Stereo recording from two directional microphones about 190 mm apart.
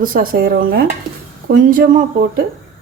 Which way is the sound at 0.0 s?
50° right (ahead or behind).